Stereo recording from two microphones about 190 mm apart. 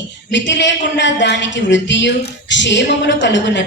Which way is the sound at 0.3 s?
70° left (ahead or behind).